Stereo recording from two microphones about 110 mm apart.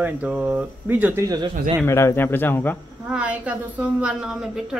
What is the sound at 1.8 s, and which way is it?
Speech, 25° left (ahead or behind).